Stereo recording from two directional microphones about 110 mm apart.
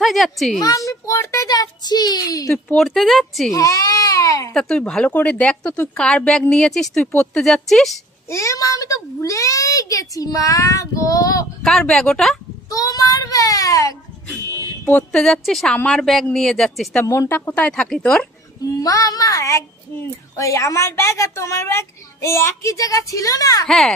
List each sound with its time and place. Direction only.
0.0 s speech: centre (ahead or behind)
0.6 s a child's voice: 30° left (ahead or behind)
2.5 s speech: centre (ahead or behind)
3.5 s baby cry: 30° left (ahead or behind)
4.6 s a woman's voice: 5° left (ahead or behind)
8.3 s a child's voice: 25° left (ahead or behind)
11.6 s speech: 5° left (ahead or behind)
12.6 s a child's voice: 35° left (ahead or behind)
14.9 s a woman's voice: 10° left (ahead or behind)
15.2 s a woman's voice: centre (ahead or behind)
17.0 s a woman's voice: 25° left (ahead or behind); by 18.2 s 5° left (ahead or behind)
18.8 s a child's voice: 35° left (ahead or behind)